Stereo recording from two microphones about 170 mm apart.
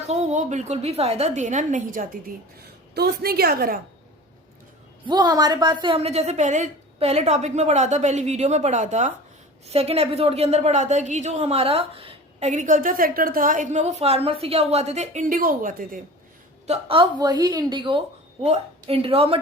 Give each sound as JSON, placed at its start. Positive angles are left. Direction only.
{"t": 0.1, "sound": "a woman's voice", "side_deg": -40}
{"t": 2.9, "sound": "a woman's voice", "side_deg": -70}
{"t": 5.0, "sound": "a woman's voice", "side_deg": -25}
{"t": 16.6, "sound": "a woman's voice", "side_deg": -35}